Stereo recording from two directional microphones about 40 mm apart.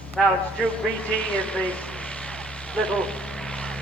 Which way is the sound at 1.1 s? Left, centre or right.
Left.